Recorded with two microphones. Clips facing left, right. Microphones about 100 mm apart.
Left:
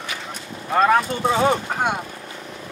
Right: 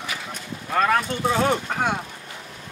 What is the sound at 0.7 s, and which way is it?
Speech, 10° left (ahead or behind).